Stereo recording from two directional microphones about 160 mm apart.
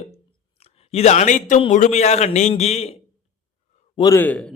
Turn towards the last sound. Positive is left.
turn(degrees=10)  # may be behind; listen again after turning